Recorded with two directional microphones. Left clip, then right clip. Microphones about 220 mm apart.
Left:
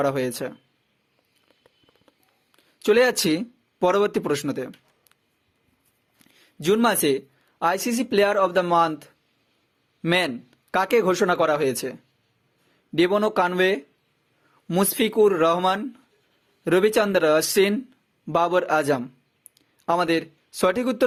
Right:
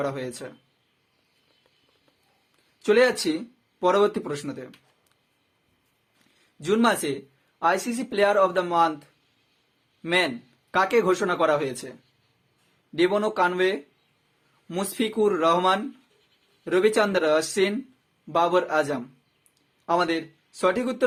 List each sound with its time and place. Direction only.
0.0 s speech: 40° left (ahead or behind)
2.7 s speech: 45° left (ahead or behind)
6.6 s speech: 40° left (ahead or behind)
13.0 s speech: 40° left (ahead or behind)